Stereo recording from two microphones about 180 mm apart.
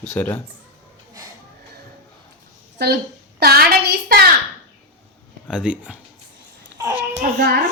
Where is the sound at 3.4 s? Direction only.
60° right (ahead or behind).